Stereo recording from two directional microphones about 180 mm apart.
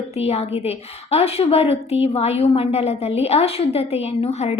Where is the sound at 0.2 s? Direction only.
35° left (ahead or behind).